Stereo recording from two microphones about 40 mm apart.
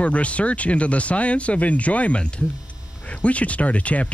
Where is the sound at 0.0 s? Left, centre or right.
Left.